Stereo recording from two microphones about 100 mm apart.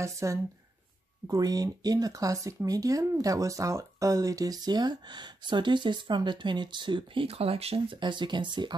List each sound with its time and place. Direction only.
0.0 s speech: 30° right (ahead or behind); by 7.2 s 55° right (ahead or behind)
7.2 s speech: 90° right
8.0 s speech: 50° right (ahead or behind)